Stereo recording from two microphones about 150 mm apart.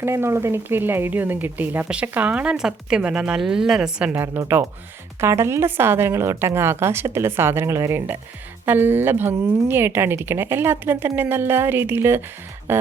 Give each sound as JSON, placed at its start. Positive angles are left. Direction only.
{"t": 0.0, "sound": "speech", "side_deg": -15}